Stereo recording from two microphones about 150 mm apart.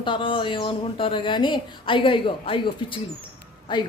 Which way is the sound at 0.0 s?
35° left (ahead or behind).